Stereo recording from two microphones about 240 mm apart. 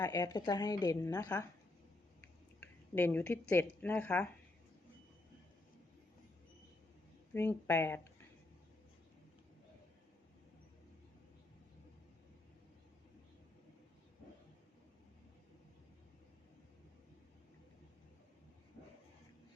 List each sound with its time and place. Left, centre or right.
0.0 s a woman's voice: centre
7.3 s a woman's voice: centre